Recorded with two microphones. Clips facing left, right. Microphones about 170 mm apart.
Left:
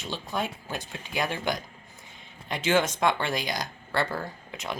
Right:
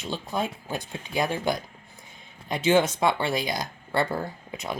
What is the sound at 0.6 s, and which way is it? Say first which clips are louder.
Speech: right 3 dB; 10° right (ahead or behind).